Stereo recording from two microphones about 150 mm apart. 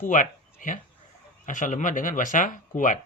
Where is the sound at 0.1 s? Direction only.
60° left (ahead or behind).